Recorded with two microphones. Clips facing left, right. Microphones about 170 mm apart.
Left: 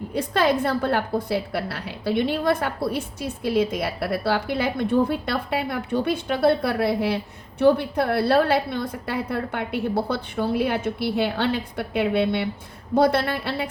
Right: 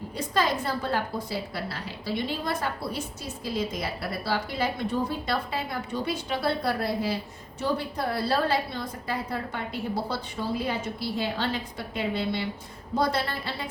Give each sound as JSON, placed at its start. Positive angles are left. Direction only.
{"t": 0.1, "sound": "a woman's voice", "side_deg": 60}